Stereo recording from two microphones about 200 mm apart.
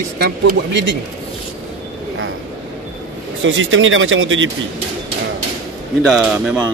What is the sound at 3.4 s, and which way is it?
Speech, 75° right (ahead or behind).